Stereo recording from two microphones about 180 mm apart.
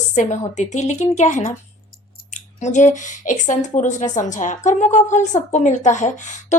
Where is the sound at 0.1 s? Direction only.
40° left (ahead or behind).